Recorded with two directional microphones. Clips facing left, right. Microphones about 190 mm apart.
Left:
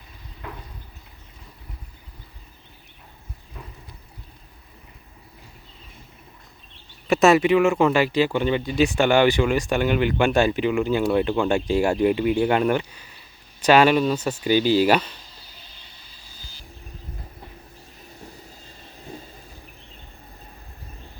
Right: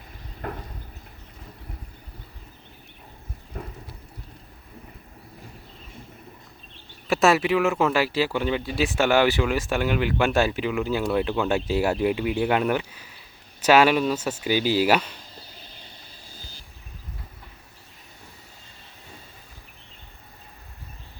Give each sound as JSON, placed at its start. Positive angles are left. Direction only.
{"t": 0.4, "sound": "a sound", "side_deg": -50}
{"t": 3.5, "sound": "clip-clop", "side_deg": -50}
{"t": 7.1, "sound": "speech", "side_deg": 0}